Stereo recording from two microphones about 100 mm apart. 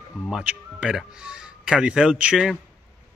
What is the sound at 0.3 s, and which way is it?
Speech, 10° right (ahead or behind).